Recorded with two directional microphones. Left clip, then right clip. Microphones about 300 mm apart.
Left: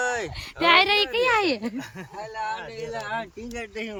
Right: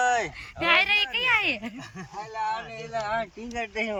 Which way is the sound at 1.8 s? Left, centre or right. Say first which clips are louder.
Left 2 dB; centre.